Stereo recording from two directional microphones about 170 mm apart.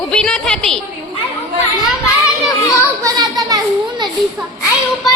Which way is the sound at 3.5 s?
20° right (ahead or behind).